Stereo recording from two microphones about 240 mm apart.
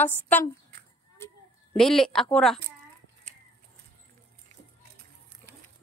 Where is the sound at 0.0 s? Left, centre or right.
Centre.